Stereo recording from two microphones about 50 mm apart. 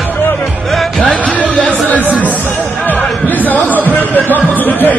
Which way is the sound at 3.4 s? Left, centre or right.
Left.